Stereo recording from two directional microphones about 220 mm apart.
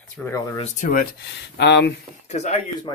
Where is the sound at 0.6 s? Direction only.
35° left (ahead or behind).